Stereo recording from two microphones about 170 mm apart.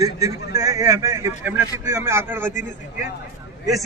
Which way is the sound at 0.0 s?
20° right (ahead or behind).